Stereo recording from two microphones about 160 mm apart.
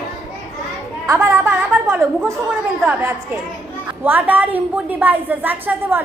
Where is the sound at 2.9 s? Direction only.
15° right (ahead or behind).